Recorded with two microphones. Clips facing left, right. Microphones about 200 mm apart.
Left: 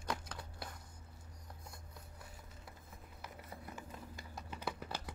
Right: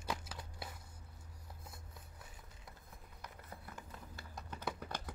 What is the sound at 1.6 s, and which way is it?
Music, centre (ahead or behind).